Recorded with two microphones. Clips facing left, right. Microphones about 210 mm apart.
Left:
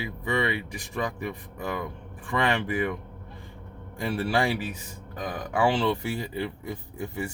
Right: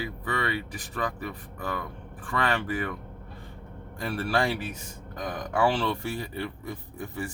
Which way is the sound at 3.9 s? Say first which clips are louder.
Left 2 dB; 10° left (ahead or behind).